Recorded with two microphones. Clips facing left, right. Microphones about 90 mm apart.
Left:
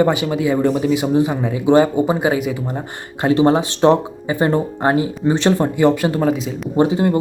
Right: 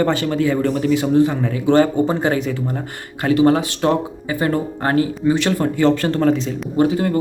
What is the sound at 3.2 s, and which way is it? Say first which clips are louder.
Speech: left 1 dB; 25° left (ahead or behind).